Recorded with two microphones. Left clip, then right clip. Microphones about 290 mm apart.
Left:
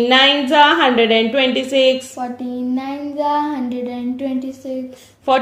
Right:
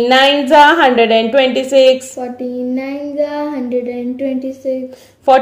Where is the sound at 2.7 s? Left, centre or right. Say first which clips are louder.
Right 3 dB; left.